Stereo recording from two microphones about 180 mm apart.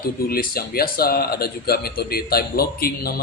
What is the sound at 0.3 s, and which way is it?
A man's voice, 55° left (ahead or behind).